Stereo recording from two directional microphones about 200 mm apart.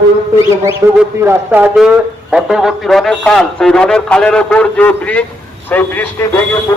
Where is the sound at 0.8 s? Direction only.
15° right (ahead or behind).